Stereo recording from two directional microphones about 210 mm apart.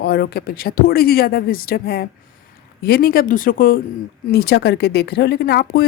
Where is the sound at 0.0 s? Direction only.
50° left (ahead or behind).